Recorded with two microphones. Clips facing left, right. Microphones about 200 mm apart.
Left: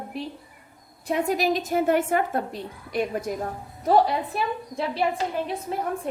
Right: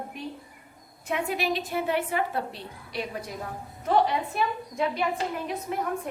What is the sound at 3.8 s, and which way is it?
Speech, 35° left (ahead or behind).